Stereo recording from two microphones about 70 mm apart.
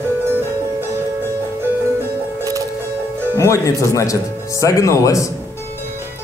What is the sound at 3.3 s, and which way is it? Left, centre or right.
Speech, left.